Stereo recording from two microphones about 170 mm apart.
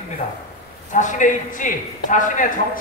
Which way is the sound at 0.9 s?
50° left (ahead or behind).